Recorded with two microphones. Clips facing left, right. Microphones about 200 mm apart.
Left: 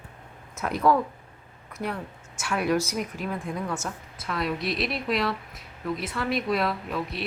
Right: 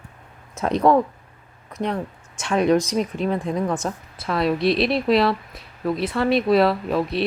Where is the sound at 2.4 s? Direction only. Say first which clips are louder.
Right 7 dB; 25° right (ahead or behind).